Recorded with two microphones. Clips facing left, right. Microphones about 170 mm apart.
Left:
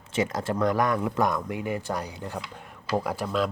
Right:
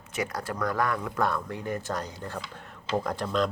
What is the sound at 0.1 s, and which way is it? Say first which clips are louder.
Speech: left 5 dB; 25° left (ahead or behind).